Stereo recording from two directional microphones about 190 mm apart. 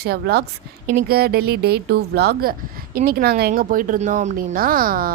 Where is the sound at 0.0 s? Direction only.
55° right (ahead or behind).